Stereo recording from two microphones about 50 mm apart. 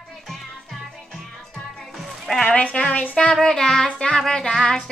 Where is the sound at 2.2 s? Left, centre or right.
Centre.